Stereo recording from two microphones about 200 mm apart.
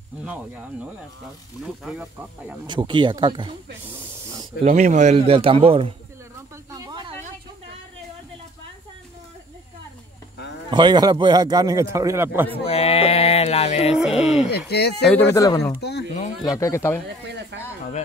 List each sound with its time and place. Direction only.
1.9 s speech: 5° right (ahead or behind)
2.6 s a man's voice: 20° right (ahead or behind)
4.6 s a man's voice: 35° right (ahead or behind)
6.7 s snake: 20° right (ahead or behind)
10.7 s a man's voice: 20° right (ahead or behind)
12.6 s mantra: 30° left (ahead or behind)
13.9 s speech: centre (ahead or behind)
14.7 s speech: 55° left (ahead or behind)
15.0 s speech: 5° left (ahead or behind)
15.3 s speech: 15° left (ahead or behind)
15.8 s a sound: 55° left (ahead or behind)
16.4 s speech: 15° left (ahead or behind)
17.5 s a sound: 60° right (ahead or behind)